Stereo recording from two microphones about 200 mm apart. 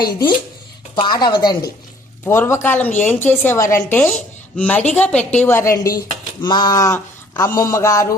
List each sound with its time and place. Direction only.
0.0 s a woman's voice: 20° left (ahead or behind)